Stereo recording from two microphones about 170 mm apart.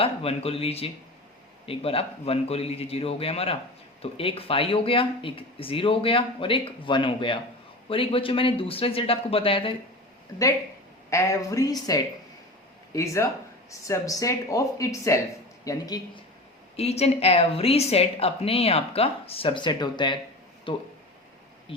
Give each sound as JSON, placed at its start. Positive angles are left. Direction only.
{"t": 0.0, "sound": "a woman's voice", "side_deg": 35}
{"t": 11.1, "sound": "speech", "side_deg": 20}
{"t": 16.7, "sound": "a woman's voice", "side_deg": 40}